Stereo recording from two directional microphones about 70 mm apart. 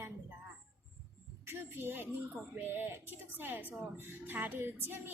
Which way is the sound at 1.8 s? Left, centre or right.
Right.